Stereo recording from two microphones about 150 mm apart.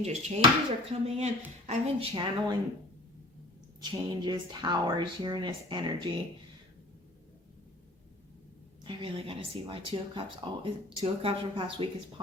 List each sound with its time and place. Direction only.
0.0 s speech: 45° right (ahead or behind)
2.1 s speech: 30° right (ahead or behind)
3.8 s speech: 30° right (ahead or behind)
8.8 s speech: 35° right (ahead or behind)